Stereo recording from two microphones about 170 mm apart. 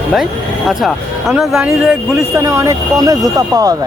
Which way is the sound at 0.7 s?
Centre (ahead or behind).